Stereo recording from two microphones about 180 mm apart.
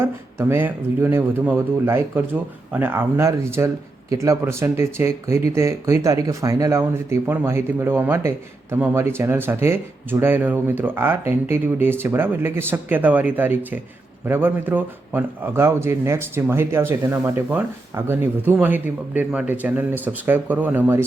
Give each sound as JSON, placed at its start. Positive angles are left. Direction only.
{"t": 0.0, "sound": "speech", "side_deg": -15}